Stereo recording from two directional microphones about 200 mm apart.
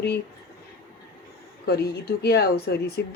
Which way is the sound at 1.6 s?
50° left (ahead or behind).